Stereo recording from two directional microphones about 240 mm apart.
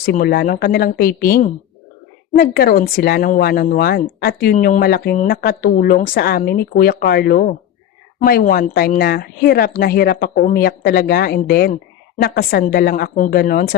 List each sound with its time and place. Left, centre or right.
0.0 s speech: left